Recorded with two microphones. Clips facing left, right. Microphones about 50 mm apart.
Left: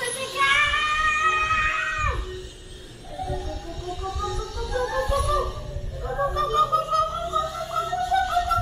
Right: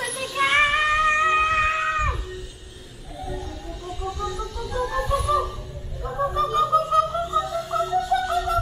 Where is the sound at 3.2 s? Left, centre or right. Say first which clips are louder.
Left 1 dB; centre.